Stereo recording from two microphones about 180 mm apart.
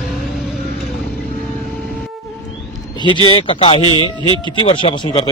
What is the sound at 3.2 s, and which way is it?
Speech, 25° left (ahead or behind).